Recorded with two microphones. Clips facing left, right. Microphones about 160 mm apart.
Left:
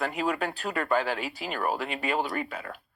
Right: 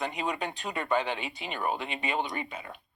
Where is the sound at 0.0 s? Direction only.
Centre (ahead or behind).